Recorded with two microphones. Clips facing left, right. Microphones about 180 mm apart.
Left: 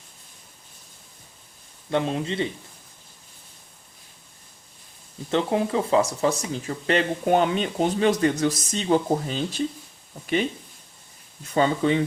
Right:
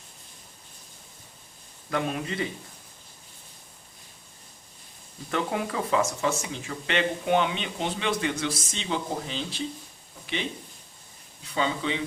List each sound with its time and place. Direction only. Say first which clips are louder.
1.9 s a man's voice: left 4 dB; 25° left (ahead or behind)
5.3 s speech: left 6 dB; 25° left (ahead or behind); by 9.6 s 45° left (ahead or behind)
11.4 s speech: left 7 dB; 45° left (ahead or behind)